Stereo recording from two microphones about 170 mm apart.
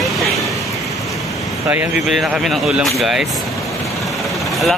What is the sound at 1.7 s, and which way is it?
Speech, 10° right (ahead or behind).